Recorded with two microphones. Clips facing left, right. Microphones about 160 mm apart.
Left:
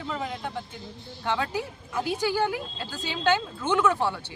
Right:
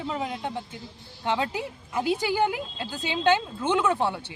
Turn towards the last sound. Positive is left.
turn(degrees=-20)  # may be behind; listen again after turning